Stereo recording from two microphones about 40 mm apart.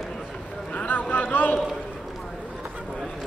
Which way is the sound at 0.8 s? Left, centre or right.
Left.